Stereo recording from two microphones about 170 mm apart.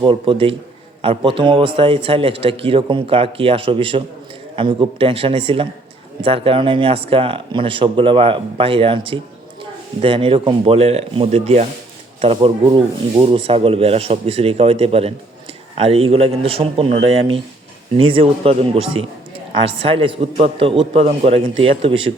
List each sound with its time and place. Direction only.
0.0 s speech: 30° right (ahead or behind)